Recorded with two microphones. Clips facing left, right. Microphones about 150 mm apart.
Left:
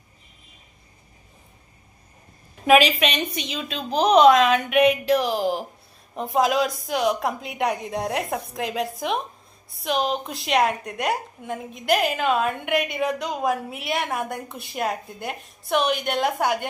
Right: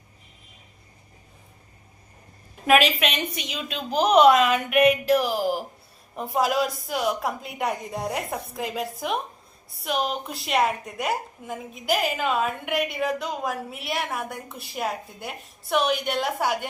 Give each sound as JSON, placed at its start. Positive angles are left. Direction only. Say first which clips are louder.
{"t": 2.6, "sound": "a woman's voice", "louder": "left 3 dB", "side_deg": 0}